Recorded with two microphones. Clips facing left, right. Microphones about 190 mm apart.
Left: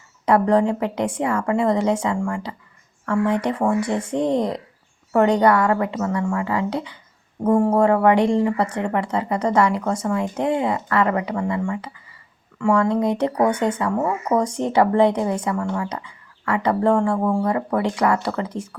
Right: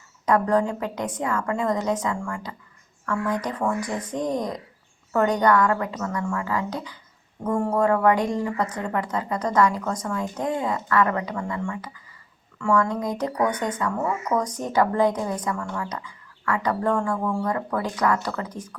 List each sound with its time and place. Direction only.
0.3 s speech: 30° left (ahead or behind)